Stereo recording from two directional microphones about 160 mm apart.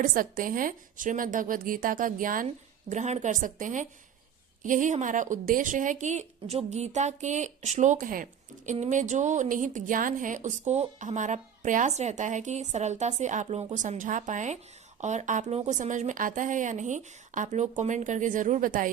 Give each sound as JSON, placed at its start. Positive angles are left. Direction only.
{"t": 0.0, "sound": "a woman's voice", "side_deg": -60}
{"t": 2.9, "sound": "speech", "side_deg": -45}